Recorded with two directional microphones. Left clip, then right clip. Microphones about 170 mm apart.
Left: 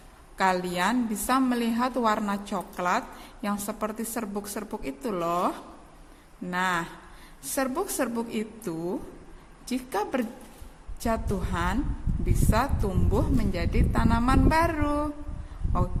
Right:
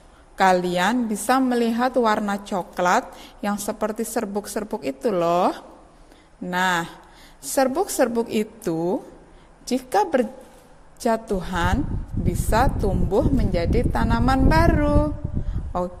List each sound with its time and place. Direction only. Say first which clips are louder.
0.3 s speech: right 7 dB; 30° right (ahead or behind)